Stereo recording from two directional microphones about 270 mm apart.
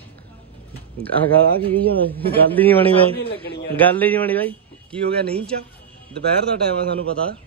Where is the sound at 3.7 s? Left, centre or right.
Centre.